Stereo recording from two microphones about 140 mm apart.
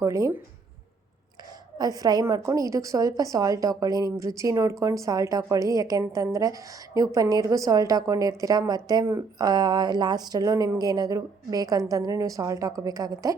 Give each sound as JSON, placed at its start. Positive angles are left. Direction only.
{"t": 0.0, "sound": "a woman's voice", "side_deg": -20}
{"t": 1.8, "sound": "a woman's voice", "side_deg": -25}